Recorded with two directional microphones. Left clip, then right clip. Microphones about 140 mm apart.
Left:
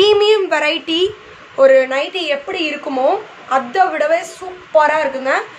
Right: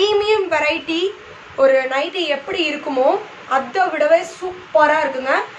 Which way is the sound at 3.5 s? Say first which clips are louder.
Left 3 dB; 45° left (ahead or behind).